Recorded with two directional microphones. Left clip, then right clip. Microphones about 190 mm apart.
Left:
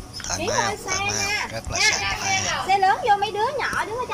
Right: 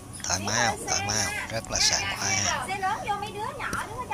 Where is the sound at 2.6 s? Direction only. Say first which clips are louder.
Left 10 dB; 40° left (ahead or behind).